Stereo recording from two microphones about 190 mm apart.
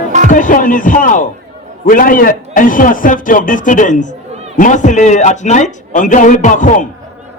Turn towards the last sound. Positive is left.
turn(degrees=40)  # may be behind; listen again after turning